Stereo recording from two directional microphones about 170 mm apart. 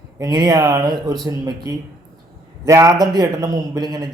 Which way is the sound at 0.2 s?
20° right (ahead or behind).